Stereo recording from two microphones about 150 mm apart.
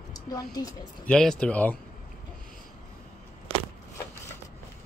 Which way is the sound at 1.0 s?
5° left (ahead or behind).